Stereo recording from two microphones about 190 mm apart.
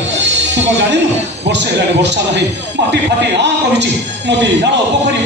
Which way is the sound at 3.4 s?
65° right (ahead or behind).